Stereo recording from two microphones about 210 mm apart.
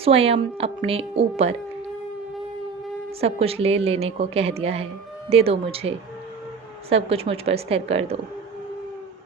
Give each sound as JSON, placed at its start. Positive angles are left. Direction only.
{"t": 0.0, "sound": "a woman's voice", "side_deg": -30}
{"t": 3.2, "sound": "a woman's voice", "side_deg": -30}
{"t": 6.9, "sound": "a woman's voice", "side_deg": -25}